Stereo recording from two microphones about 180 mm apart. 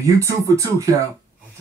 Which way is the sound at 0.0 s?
15° right (ahead or behind).